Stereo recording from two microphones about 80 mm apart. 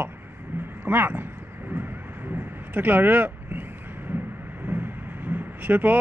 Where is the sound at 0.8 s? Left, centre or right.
Right.